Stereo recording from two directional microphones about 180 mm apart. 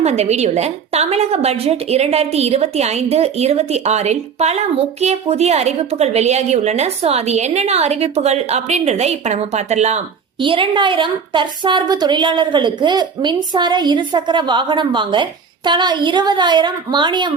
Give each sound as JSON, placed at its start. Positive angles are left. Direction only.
{"t": 0.0, "sound": "a woman's voice", "side_deg": -35}
{"t": 10.4, "sound": "a woman's voice", "side_deg": -30}